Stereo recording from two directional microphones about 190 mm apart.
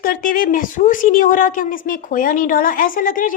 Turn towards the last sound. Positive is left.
turn(degrees=45)  # may be behind; listen again after turning